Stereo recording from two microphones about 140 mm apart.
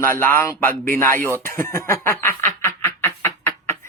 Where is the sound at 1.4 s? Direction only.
20° left (ahead or behind).